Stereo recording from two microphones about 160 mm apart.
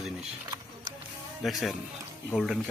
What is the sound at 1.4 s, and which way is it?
Speech, centre (ahead or behind).